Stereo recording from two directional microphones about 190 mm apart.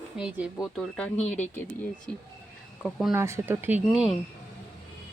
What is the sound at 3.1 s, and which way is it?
Speech, 15° right (ahead or behind).